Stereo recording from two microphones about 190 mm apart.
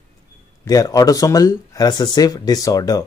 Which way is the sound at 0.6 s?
20° left (ahead or behind).